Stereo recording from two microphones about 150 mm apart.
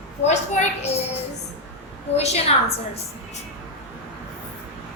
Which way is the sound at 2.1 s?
45° left (ahead or behind).